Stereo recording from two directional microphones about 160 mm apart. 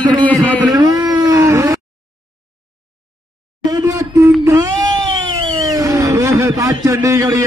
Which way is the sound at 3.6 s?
20° right (ahead or behind).